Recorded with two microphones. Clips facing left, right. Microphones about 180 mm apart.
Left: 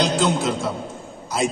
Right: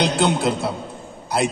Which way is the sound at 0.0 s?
65° right (ahead or behind).